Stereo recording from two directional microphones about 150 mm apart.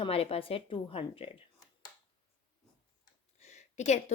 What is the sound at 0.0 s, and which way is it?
A woman's voice, 40° left (ahead or behind).